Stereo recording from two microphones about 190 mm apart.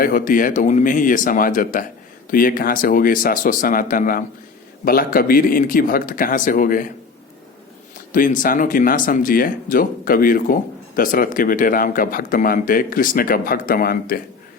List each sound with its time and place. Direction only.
0.0 s speech: 45° left (ahead or behind)
8.1 s speech: 45° left (ahead or behind)